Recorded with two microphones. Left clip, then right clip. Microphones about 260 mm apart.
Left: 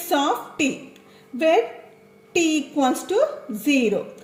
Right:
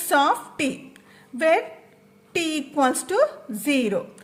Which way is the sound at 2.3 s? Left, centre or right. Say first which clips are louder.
Left 4 dB; right.